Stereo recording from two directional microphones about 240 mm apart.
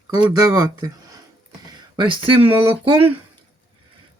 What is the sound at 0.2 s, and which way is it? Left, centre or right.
Speech, centre.